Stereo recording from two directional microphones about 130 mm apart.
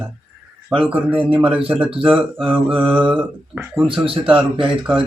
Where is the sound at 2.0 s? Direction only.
10° right (ahead or behind).